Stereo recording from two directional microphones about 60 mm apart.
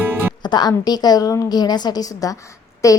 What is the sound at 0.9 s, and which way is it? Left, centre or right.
A woman's voice, left.